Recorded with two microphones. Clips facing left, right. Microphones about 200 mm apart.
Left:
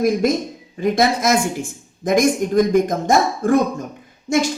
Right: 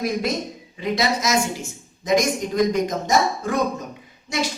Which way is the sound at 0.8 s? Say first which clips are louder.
Left 5 dB; 50° left (ahead or behind).